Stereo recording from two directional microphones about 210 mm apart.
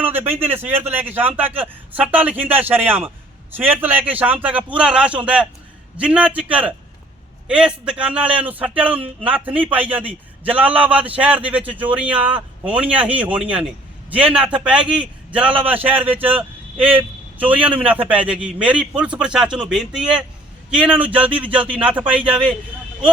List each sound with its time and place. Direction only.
0.0 s a sound: 10° right (ahead or behind)
0.6 s a man's voice: 10° right (ahead or behind)
22.2 s speech: 25° right (ahead or behind)